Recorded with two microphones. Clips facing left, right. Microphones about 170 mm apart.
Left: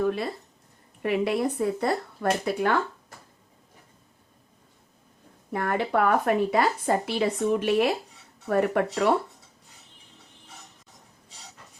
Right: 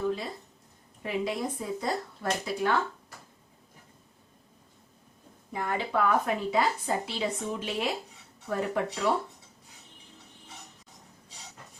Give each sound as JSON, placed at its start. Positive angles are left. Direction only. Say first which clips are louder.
{"t": 0.0, "sound": "a sound", "louder": "left 5 dB", "side_deg": 65}
{"t": 1.0, "sound": "speech", "louder": "left 6 dB", "side_deg": 65}
{"t": 5.5, "sound": "speech", "louder": "left 5 dB", "side_deg": 60}